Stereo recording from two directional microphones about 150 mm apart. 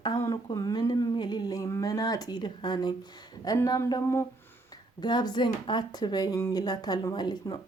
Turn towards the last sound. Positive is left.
turn(degrees=30)  # may be behind; listen again after turning